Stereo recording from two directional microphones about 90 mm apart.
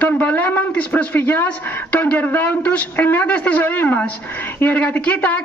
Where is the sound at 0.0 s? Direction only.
20° left (ahead or behind).